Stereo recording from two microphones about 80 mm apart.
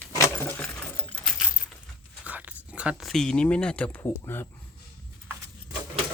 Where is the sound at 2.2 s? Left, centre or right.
Centre.